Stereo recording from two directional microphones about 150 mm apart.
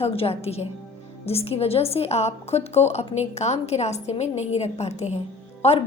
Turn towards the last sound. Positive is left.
turn(degrees=45)  # may be behind; listen again after turning